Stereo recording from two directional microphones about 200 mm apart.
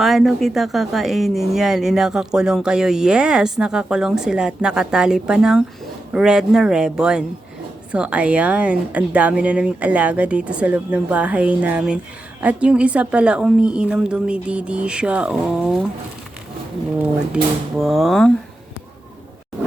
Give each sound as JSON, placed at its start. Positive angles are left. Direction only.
{"t": 0.0, "sound": "speech", "side_deg": 0}
{"t": 17.0, "sound": "speech", "side_deg": -5}